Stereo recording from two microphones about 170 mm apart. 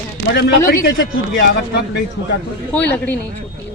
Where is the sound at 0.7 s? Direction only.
85° left.